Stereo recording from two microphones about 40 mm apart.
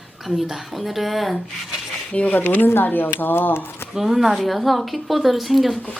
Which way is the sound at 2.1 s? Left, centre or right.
Left.